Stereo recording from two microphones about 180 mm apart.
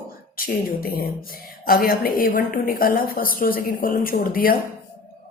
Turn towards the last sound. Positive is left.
turn(degrees=50)  # may be behind; listen again after turning